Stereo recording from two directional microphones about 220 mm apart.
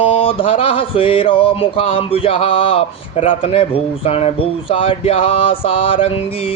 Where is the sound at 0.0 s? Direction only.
25° left (ahead or behind).